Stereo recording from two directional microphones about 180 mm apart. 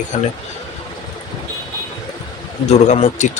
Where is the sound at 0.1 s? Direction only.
40° left (ahead or behind).